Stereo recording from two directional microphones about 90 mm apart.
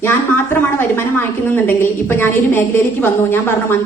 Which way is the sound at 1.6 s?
25° left (ahead or behind).